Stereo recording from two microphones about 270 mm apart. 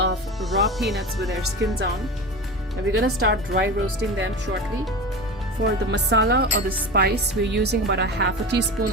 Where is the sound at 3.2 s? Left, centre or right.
Right.